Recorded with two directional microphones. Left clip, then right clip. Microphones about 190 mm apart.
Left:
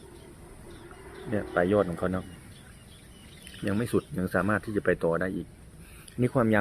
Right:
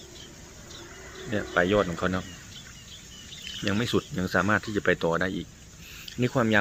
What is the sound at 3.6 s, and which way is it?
Speech, 5° left (ahead or behind).